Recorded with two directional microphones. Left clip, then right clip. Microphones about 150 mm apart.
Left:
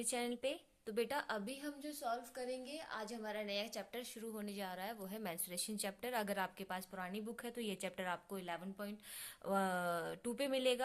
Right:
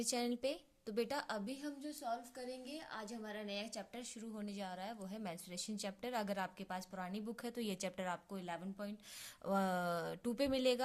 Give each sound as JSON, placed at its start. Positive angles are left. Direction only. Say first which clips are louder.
{"t": 0.0, "sound": "a woman's voice", "louder": "right 1 dB", "side_deg": -35}